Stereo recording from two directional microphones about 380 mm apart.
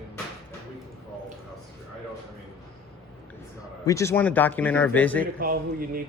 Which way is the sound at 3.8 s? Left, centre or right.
Centre.